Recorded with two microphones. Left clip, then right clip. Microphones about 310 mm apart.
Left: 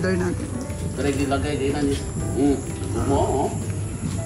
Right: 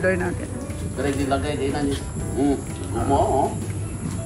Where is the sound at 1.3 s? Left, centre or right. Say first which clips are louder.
Even; centre.